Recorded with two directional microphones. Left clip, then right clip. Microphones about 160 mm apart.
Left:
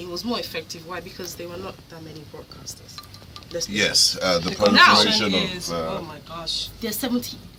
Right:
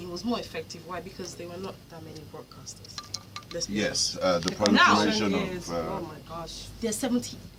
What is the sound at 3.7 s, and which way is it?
Speech, 60° left (ahead or behind).